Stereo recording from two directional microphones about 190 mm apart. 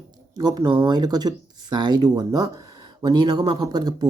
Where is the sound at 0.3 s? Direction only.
20° right (ahead or behind).